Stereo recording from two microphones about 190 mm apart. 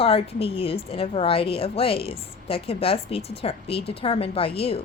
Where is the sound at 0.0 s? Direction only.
30° left (ahead or behind).